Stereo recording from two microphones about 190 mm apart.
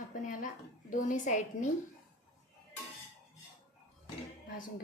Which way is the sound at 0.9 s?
45° left (ahead or behind).